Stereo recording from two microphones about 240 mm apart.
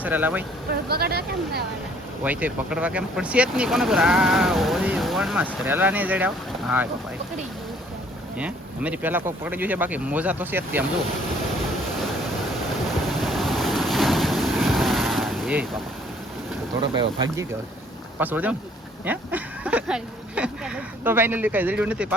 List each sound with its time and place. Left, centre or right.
0.0 s speech: centre
0.9 s speech: right
2.2 s speech: centre
8.4 s speech: centre
12.9 s waves: centre
18.2 s speech: centre